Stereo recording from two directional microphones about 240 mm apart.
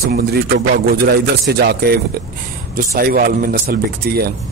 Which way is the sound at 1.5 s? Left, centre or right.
Right.